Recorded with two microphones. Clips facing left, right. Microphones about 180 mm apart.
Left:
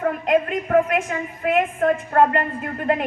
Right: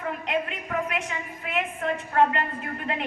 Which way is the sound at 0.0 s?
45° left (ahead or behind).